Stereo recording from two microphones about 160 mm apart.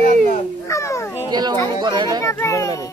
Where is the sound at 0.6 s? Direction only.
20° left (ahead or behind).